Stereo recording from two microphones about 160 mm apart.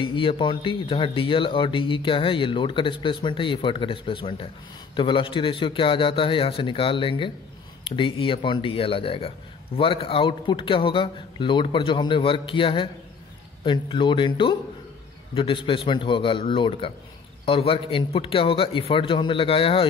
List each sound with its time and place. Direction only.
0.0 s speech: 35° left (ahead or behind)